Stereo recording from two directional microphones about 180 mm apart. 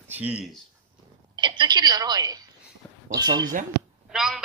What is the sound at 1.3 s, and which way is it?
A woman's voice, 25° right (ahead or behind).